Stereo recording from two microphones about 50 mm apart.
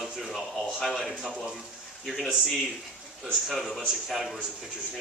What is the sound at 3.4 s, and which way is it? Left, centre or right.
Speech, centre.